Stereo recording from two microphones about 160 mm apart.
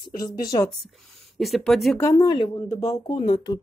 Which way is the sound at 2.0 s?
20° left (ahead or behind).